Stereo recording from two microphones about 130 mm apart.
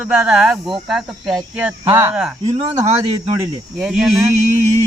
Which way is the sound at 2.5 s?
55° right (ahead or behind).